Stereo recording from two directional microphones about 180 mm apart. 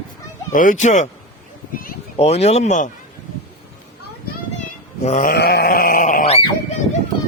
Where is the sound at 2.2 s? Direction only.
35° left (ahead or behind).